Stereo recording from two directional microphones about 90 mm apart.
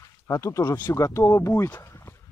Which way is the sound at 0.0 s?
35° left (ahead or behind).